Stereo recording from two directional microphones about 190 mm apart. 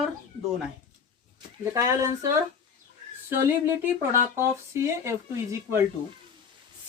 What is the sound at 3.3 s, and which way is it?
Speech, 10° right (ahead or behind).